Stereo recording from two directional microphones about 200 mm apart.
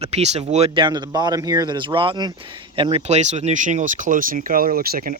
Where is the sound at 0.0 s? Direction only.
30° right (ahead or behind).